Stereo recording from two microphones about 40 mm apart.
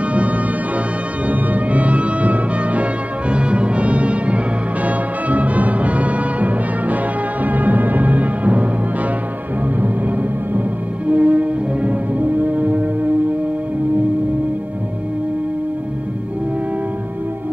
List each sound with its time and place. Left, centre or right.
1.2 s music: right
9.8 s music: right
11.1 s music: right